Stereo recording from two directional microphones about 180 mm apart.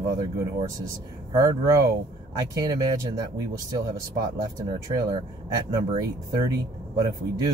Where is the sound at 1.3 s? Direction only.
20° right (ahead or behind).